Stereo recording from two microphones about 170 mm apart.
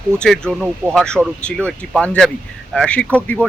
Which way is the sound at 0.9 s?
5° left (ahead or behind).